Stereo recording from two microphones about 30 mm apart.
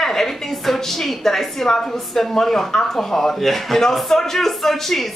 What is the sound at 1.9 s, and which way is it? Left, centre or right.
Speech, centre.